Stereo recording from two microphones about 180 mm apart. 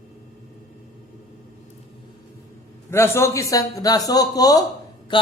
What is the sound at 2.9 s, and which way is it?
Speech, 15° left (ahead or behind).